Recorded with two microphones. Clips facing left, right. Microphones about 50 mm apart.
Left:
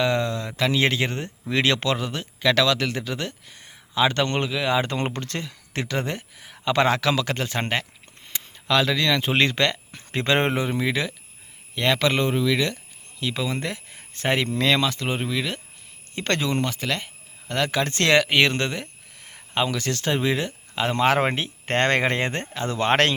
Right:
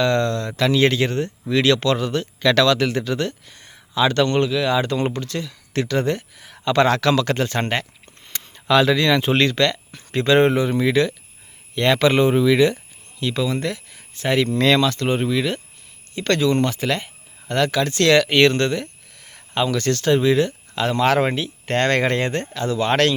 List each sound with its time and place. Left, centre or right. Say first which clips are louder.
0.0 s speech: right 4 dB; centre
2.0 s speech: right 6 dB; centre
4.9 s speech: right 4 dB; left
5.7 s speech: right 6 dB; centre
8.5 s speech: right 5 dB; centre
9.3 s speech: right 3 dB; left
10.7 s speech: right 6 dB; centre
13.3 s speech: right 6 dB; centre
14.8 s speech: right 5 dB; centre
16.1 s speech: right 5 dB; left
16.6 s speech: right 5 dB; centre
17.7 s speech: right 4 dB; left
18.1 s speech: right 4 dB; centre
22.7 s speech: right 2 dB; left